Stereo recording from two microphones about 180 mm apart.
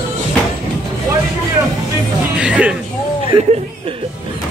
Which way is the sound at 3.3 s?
25° right (ahead or behind).